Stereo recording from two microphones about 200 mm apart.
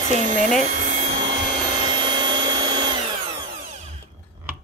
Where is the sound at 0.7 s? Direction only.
35° right (ahead or behind).